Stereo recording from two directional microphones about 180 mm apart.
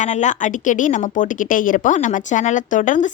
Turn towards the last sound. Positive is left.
turn(degrees=45)  # may be behind; listen again after turning